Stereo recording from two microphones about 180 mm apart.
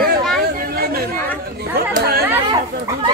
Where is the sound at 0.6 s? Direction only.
55° right (ahead or behind).